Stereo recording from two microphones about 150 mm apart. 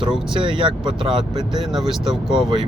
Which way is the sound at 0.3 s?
35° right (ahead or behind).